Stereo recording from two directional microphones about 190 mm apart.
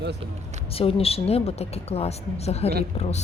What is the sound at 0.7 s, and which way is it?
Speech, 30° left (ahead or behind).